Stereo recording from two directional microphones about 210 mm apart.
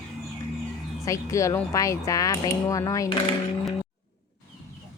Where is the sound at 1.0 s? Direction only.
15° left (ahead or behind).